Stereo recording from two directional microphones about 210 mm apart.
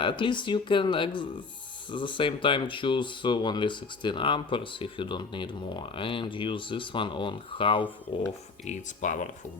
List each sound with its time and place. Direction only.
0.0 s speech: 25° left (ahead or behind)
8.6 s speech: 35° left (ahead or behind)